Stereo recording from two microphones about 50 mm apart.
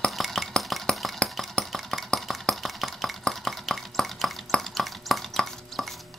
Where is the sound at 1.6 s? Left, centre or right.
Centre.